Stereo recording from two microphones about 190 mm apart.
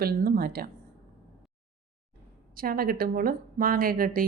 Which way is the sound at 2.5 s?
50° right (ahead or behind).